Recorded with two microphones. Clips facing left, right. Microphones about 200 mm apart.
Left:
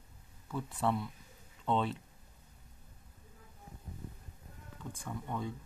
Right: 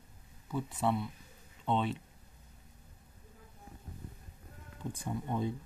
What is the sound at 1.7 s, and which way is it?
Speech, 20° right (ahead or behind).